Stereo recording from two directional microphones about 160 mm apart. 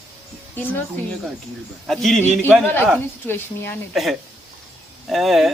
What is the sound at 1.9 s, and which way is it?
Speech, centre (ahead or behind).